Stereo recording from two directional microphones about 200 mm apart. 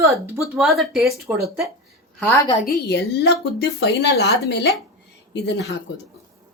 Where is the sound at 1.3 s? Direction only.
15° right (ahead or behind).